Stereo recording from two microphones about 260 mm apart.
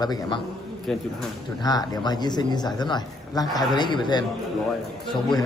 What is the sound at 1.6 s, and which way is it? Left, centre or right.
Speech, centre.